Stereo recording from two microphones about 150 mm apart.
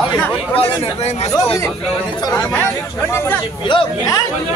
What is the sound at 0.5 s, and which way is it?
Speech, 40° left (ahead or behind).